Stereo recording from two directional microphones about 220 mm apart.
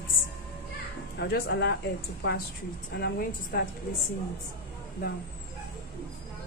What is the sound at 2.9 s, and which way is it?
Speech, 45° left (ahead or behind).